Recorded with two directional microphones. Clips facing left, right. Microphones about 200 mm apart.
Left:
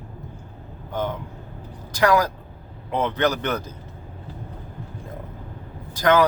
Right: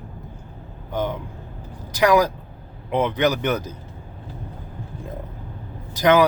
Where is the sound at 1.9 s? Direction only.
15° right (ahead or behind).